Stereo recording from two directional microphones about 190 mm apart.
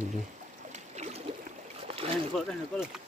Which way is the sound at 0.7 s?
35° right (ahead or behind).